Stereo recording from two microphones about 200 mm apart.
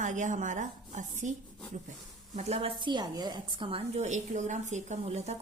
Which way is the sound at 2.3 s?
35° right (ahead or behind).